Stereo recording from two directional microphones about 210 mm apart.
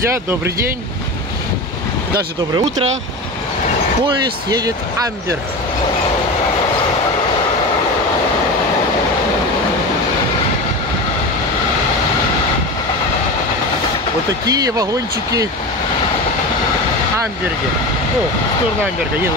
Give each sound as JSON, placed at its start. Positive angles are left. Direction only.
{"t": 2.5, "sound": "speech", "side_deg": -30}
{"t": 4.5, "sound": "speech", "side_deg": -20}
{"t": 14.4, "sound": "speech", "side_deg": -15}